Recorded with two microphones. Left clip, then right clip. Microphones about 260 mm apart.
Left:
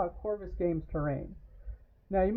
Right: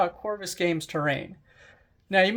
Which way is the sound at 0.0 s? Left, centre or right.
Right.